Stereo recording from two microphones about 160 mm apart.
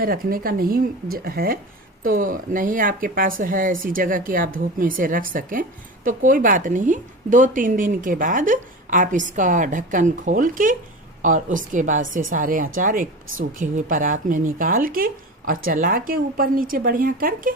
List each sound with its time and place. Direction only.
0.0 s a woman's voice: 65° right (ahead or behind)